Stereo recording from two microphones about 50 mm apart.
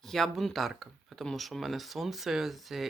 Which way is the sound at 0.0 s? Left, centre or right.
Centre.